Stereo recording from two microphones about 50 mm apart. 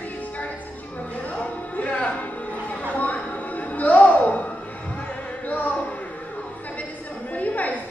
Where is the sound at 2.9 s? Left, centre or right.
Left.